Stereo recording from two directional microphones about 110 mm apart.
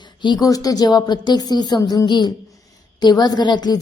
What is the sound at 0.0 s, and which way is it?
A woman's voice, 45° left (ahead or behind).